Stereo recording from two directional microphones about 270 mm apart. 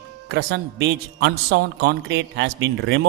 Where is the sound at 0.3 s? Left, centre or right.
Right.